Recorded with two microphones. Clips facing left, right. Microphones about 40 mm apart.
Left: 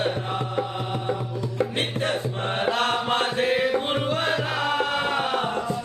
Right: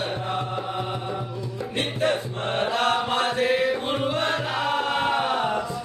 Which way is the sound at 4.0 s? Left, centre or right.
Centre.